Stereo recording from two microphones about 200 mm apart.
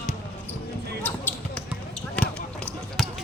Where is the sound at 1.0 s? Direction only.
10° left (ahead or behind).